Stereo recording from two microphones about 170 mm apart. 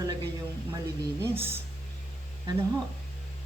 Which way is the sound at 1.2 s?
15° right (ahead or behind).